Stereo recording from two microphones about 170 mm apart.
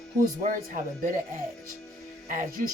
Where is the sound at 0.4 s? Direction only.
50° right (ahead or behind).